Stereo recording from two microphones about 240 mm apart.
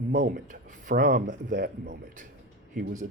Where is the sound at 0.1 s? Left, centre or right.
Right.